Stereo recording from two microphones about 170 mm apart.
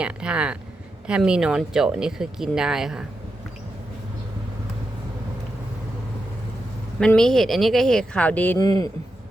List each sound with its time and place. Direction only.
0.0 s speech: 5° right (ahead or behind)
7.0 s speech: 5° left (ahead or behind)
8.5 s a man's voice: 20° left (ahead or behind)